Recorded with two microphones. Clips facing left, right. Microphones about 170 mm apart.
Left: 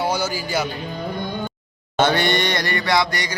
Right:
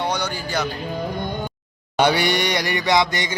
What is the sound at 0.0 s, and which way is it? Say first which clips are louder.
Speech: left 2 dB; 5° left (ahead or behind).